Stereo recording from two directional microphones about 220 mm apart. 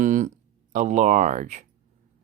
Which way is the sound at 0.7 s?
35° right (ahead or behind).